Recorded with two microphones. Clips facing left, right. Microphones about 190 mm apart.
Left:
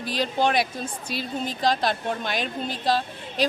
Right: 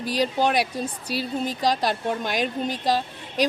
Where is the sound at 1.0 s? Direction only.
40° right (ahead or behind).